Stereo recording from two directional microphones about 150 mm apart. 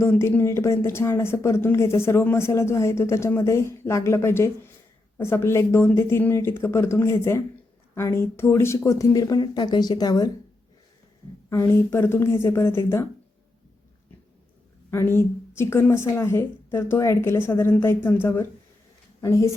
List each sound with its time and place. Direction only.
0.0 s speech: 15° left (ahead or behind)
11.4 s speech: 20° left (ahead or behind)
14.8 s speech: 15° left (ahead or behind)